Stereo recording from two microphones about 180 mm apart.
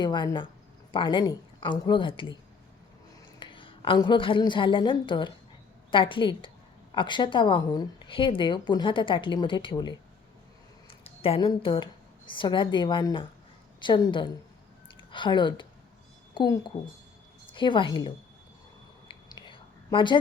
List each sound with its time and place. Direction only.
0.0 s speech: 25° left (ahead or behind)
3.4 s a woman's voice: 30° left (ahead or behind)
19.0 s whispering: 25° left (ahead or behind)